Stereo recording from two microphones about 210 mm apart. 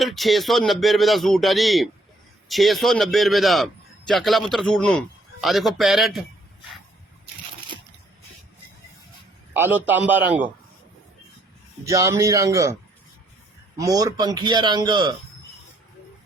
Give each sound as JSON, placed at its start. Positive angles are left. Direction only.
{"t": 0.0, "sound": "a man's voice", "side_deg": 0}
{"t": 9.5, "sound": "a man's voice", "side_deg": -10}
{"t": 11.9, "sound": "a man's voice", "side_deg": -15}
{"t": 13.7, "sound": "a man's voice", "side_deg": -15}